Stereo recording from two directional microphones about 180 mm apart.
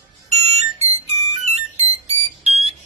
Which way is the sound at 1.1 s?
40° right (ahead or behind).